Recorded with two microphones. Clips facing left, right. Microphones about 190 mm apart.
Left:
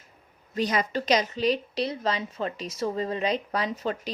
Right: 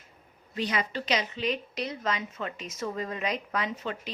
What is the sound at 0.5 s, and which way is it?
A woman's voice, 40° left (ahead or behind).